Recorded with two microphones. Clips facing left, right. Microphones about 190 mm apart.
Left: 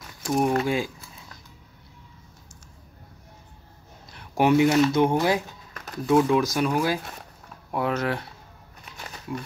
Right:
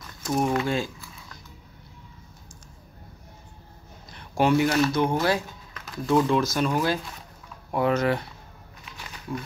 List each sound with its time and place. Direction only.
0.2 s a sound: 10° left (ahead or behind)
0.7 s speech: 10° left (ahead or behind)
4.4 s speech: 20° left (ahead or behind); by 8.3 s centre (ahead or behind)